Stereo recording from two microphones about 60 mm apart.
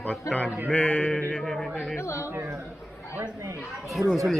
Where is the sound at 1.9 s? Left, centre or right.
Left.